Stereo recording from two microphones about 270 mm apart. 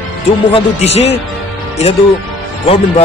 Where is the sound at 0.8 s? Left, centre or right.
Left.